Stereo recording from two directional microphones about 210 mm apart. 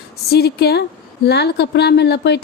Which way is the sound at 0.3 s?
50° left (ahead or behind).